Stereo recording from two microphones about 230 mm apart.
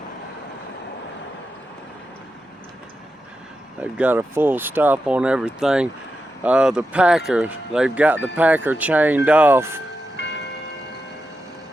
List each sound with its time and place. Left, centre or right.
3.8 s speech: centre